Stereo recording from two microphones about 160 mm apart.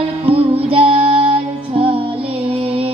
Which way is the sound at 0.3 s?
35° right (ahead or behind).